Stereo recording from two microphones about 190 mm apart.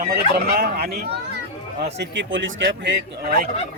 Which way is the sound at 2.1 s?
75° right (ahead or behind).